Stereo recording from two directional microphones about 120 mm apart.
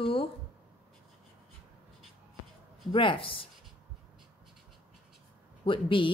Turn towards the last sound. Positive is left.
turn(degrees=45)  # may be behind; listen again after turning